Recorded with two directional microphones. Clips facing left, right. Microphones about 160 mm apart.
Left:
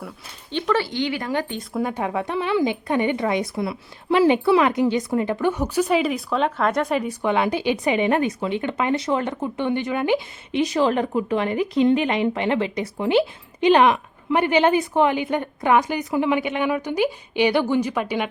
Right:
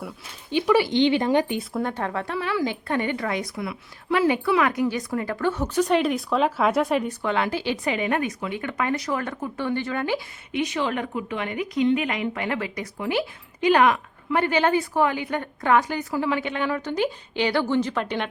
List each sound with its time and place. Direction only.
0.5 s speech: 10° right (ahead or behind)
1.7 s a woman's voice: 10° left (ahead or behind)
7.1 s speech: 15° left (ahead or behind)
10.5 s a woman's voice: 35° left (ahead or behind); by 18.3 s 10° left (ahead or behind)